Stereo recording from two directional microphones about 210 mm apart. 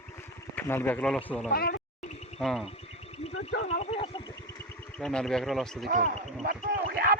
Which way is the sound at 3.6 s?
30° left (ahead or behind).